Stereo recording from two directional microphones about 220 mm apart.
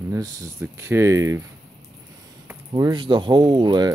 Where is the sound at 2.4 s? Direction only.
20° right (ahead or behind).